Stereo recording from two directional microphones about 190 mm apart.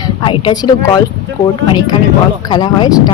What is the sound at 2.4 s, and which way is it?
Speech, 20° left (ahead or behind).